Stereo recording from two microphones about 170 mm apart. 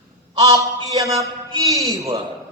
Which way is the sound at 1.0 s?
20° right (ahead or behind).